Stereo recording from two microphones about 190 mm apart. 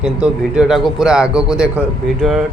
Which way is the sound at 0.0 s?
5° right (ahead or behind).